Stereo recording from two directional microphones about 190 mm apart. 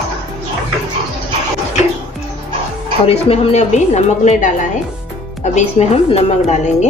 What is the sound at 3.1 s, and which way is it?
Speech, 30° left (ahead or behind).